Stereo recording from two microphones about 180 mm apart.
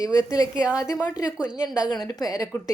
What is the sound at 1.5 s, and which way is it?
Speech, 5° right (ahead or behind).